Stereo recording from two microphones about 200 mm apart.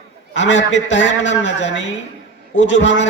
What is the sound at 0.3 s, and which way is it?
A man's voice, 65° left (ahead or behind).